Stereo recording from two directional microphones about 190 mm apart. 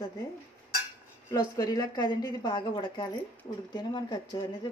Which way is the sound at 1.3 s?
20° left (ahead or behind).